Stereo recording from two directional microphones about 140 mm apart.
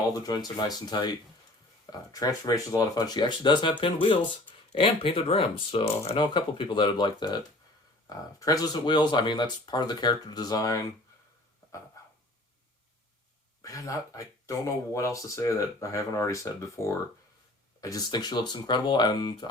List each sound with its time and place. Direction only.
0.2 s speech: 30° left (ahead or behind)
13.6 s speech: 25° left (ahead or behind)